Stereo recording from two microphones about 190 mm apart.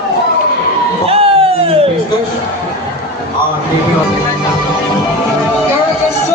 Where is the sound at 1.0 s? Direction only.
30° right (ahead or behind).